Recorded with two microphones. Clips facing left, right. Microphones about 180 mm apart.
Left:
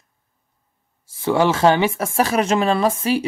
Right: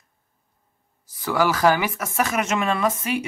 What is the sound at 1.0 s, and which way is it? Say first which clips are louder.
Speech: left 4 dB; 25° left (ahead or behind).